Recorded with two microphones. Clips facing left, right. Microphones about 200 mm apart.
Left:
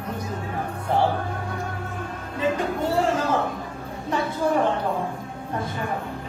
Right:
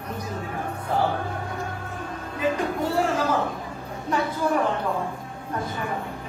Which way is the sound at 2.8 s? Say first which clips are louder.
Left 1 dB; 25° left (ahead or behind).